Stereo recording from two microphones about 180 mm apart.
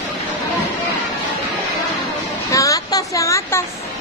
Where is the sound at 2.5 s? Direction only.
20° left (ahead or behind).